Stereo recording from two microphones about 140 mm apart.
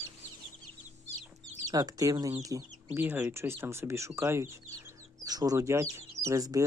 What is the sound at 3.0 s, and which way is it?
Speech, 15° right (ahead or behind).